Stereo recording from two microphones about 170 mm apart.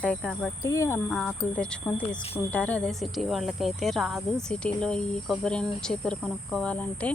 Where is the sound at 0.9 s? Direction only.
5° left (ahead or behind).